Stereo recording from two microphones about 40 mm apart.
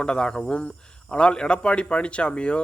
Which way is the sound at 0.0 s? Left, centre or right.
Left.